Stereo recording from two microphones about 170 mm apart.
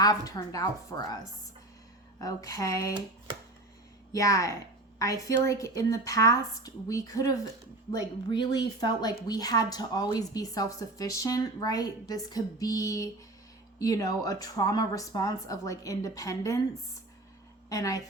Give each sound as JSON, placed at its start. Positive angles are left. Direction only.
{"t": 0.0, "sound": "a woman's voice", "side_deg": 25}
{"t": 4.1, "sound": "a woman's voice", "side_deg": 20}
{"t": 17.7, "sound": "a woman's voice", "side_deg": 20}